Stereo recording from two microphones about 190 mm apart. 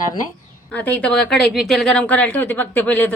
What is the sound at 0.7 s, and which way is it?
Speech, 10° left (ahead or behind).